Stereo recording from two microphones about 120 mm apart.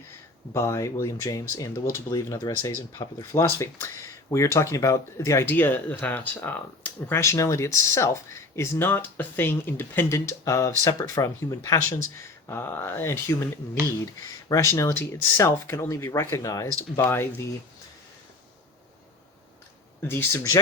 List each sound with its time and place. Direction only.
0.5 s speech: 25° left (ahead or behind)
3.0 s speech: 35° left (ahead or behind)
3.3 s speech: 25° left (ahead or behind)
14.5 s speech: 25° left (ahead or behind)
20.0 s speech: 20° left (ahead or behind)